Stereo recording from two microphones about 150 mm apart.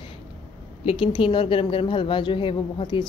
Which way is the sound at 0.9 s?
35° left (ahead or behind).